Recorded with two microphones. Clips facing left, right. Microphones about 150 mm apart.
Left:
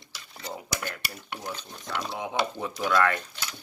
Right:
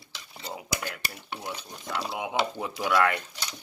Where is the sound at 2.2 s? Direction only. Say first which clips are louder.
Even; 10° right (ahead or behind).